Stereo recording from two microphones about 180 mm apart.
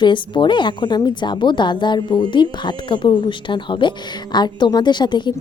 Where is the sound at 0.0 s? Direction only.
25° left (ahead or behind).